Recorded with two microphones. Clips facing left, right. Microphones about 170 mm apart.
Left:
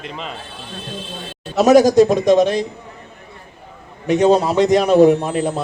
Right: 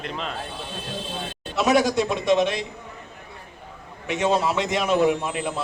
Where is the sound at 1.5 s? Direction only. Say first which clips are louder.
Left 9 dB; 40° left (ahead or behind).